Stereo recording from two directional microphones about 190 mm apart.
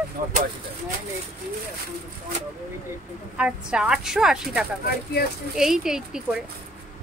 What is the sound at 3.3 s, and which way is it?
Speech, 5° right (ahead or behind).